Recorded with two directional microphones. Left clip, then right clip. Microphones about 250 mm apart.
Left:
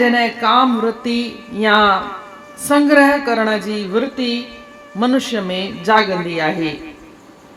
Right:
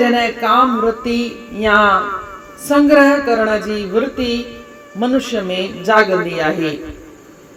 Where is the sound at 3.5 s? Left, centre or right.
Left.